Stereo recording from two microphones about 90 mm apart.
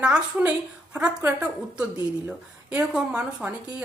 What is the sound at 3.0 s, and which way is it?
Speech, 15° right (ahead or behind).